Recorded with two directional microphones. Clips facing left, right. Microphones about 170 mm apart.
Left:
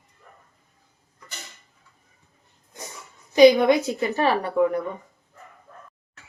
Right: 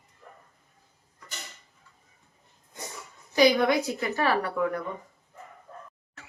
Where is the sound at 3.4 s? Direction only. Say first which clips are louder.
Left 7 dB; 20° left (ahead or behind).